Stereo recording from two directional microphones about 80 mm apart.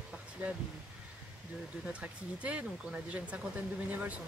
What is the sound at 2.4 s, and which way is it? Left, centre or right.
Speech, centre.